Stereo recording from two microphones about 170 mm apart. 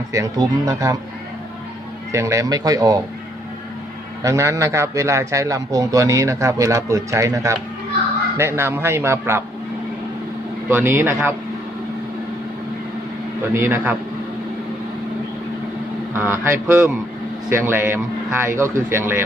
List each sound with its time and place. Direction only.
0.1 s speech: 20° right (ahead or behind)
2.1 s speech: 20° right (ahead or behind)
4.2 s a man's voice: 20° right (ahead or behind)
10.7 s a man's voice: 15° right (ahead or behind)
13.5 s a man's voice: 15° right (ahead or behind)
16.1 s a man's voice: 15° right (ahead or behind)